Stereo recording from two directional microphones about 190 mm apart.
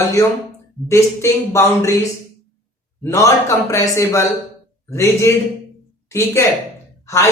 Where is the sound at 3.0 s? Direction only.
15° left (ahead or behind).